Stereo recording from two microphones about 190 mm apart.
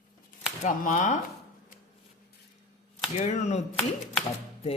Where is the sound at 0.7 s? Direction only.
40° left (ahead or behind).